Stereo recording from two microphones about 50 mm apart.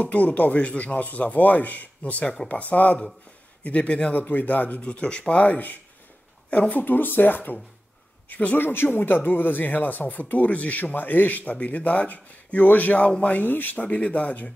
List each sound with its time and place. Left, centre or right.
0.0 s speech: left
4.1 s speech: left
8.5 s speech: left
13.8 s speech: left